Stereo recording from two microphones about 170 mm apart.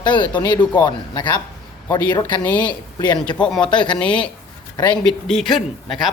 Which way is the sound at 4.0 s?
5° left (ahead or behind).